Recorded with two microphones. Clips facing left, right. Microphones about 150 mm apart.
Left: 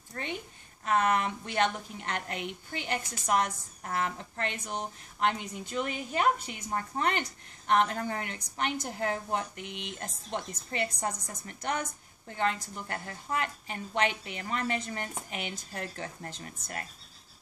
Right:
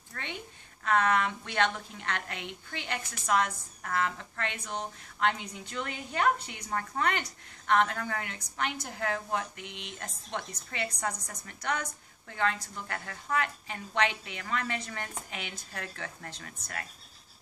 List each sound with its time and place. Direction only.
0.1 s a woman's voice: 25° left (ahead or behind)